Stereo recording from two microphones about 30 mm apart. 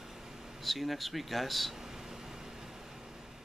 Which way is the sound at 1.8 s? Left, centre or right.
Centre.